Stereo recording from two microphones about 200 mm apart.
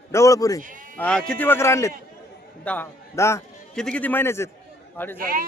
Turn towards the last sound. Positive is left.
turn(degrees=-45)  # may be behind; listen again after turning